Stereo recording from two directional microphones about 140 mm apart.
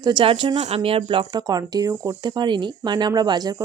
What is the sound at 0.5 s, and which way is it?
Speech, 50° right (ahead or behind).